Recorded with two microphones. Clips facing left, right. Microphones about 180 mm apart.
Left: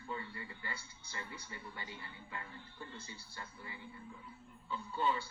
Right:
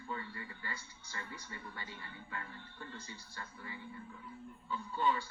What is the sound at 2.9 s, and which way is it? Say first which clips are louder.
Speech: right 1 dB; 25° left (ahead or behind).